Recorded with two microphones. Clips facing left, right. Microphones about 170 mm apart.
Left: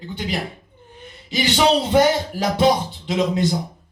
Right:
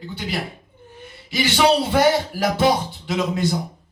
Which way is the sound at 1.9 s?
20° left (ahead or behind).